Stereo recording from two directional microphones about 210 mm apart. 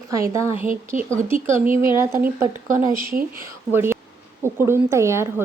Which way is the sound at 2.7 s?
40° right (ahead or behind).